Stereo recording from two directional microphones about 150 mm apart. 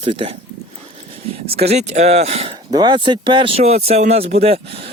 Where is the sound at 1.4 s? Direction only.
45° right (ahead or behind).